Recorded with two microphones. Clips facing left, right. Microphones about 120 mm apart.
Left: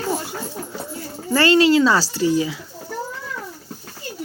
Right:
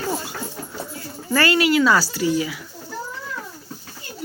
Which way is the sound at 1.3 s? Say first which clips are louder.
Left 3 dB; 25° left (ahead or behind).